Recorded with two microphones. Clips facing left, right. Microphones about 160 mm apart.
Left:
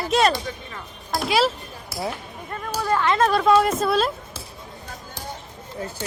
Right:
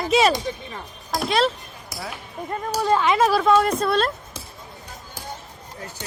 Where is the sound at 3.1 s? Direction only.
5° right (ahead or behind).